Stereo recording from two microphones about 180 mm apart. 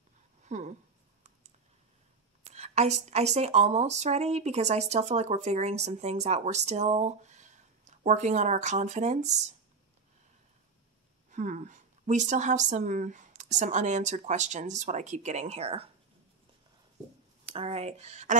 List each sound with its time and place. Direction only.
0.4 s speech: 40° right (ahead or behind)
2.5 s speech: 40° right (ahead or behind)
11.2 s speech: 45° right (ahead or behind)
17.5 s speech: 30° right (ahead or behind)